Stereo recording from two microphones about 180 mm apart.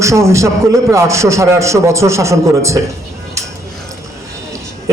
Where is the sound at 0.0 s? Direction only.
15° right (ahead or behind).